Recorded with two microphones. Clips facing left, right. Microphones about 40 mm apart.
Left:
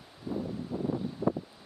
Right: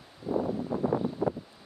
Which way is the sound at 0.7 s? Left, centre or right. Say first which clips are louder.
Right 4 dB; right.